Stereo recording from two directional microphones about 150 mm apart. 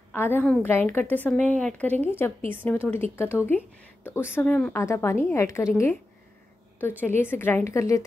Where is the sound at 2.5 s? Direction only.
10° left (ahead or behind).